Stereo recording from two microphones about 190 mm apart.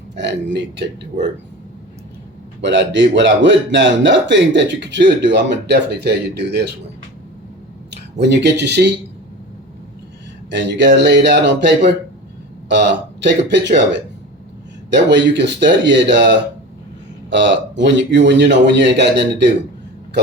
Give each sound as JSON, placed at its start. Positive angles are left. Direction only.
{"t": 0.2, "sound": "a man's voice", "side_deg": -70}
{"t": 2.6, "sound": "a man's voice", "side_deg": -70}
{"t": 7.9, "sound": "speech", "side_deg": -65}
{"t": 10.5, "sound": "a man's voice", "side_deg": -65}